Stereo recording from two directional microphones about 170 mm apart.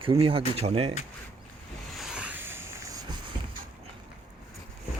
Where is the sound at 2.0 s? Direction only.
5° right (ahead or behind).